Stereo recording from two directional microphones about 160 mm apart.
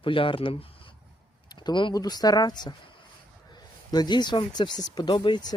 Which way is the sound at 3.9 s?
25° left (ahead or behind).